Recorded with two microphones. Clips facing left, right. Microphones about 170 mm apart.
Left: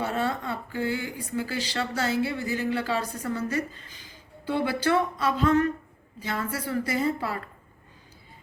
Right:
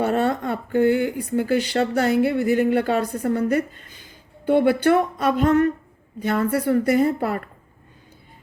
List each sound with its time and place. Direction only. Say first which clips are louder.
0.0 s speech: right 7 dB; 60° right (ahead or behind)